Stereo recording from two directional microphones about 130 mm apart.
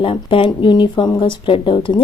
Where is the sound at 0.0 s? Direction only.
45° left (ahead or behind).